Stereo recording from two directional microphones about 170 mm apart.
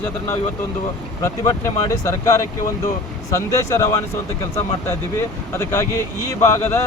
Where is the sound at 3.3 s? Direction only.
15° left (ahead or behind).